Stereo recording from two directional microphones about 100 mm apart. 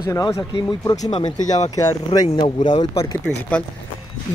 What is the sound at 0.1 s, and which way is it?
Speech, 30° left (ahead or behind).